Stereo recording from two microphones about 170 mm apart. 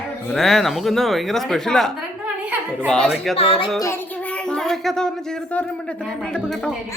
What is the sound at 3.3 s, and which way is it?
Music, 35° left (ahead or behind).